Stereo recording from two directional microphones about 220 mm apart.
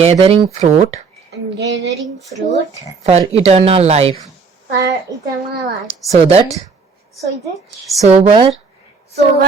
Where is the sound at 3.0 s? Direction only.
30° right (ahead or behind).